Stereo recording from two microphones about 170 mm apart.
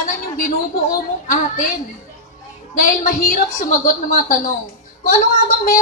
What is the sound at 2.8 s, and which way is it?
A woman's voice, 55° left (ahead or behind).